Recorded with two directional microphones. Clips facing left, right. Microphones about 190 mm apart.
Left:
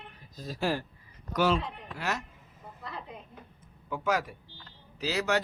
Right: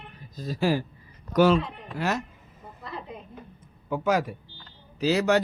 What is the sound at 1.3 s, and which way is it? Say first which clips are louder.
Speech: right 7 dB; 45° right (ahead or behind).